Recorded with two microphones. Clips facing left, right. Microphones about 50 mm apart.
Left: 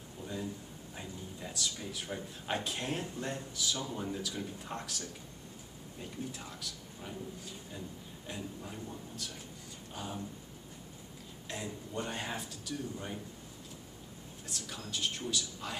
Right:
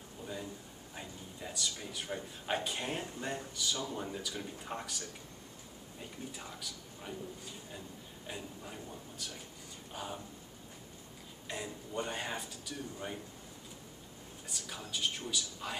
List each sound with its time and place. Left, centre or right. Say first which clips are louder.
0.9 s speech: left 2 dB; centre
8.3 s speech: left 2 dB; centre
11.4 s speech: even; centre
14.5 s speech: left 1 dB; centre